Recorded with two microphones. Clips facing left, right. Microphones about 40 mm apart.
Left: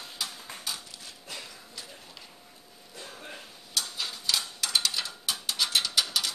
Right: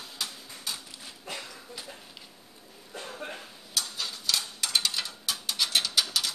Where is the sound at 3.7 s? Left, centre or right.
Centre.